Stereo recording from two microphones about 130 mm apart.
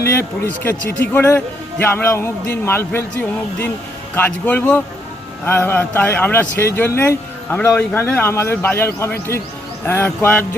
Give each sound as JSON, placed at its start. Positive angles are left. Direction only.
{"t": 0.0, "sound": "a man's voice", "side_deg": 20}